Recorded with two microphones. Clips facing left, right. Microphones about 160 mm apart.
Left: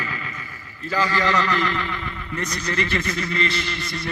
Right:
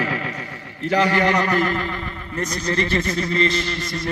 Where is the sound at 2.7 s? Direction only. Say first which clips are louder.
Right 4 dB; 35° right (ahead or behind).